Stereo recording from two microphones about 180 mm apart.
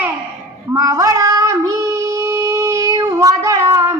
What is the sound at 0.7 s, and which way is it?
Child singing, 15° right (ahead or behind).